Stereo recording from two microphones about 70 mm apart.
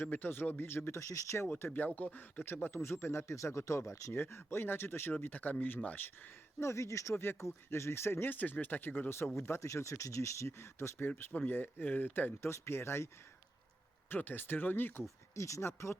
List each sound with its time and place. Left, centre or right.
0.0 s speech: left
1.5 s speech: left
4.1 s speech: left
6.6 s speech: left
12.5 s speech: left
14.1 s speech: left
15.4 s speech: left